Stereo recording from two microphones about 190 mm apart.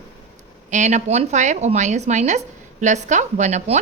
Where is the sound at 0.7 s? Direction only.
40° right (ahead or behind).